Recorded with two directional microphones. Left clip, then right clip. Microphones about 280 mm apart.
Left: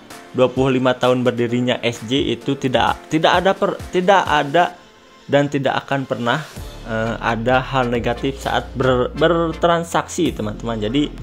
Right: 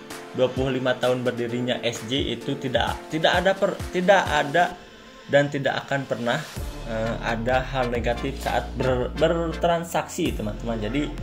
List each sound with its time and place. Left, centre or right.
0.4 s speech: left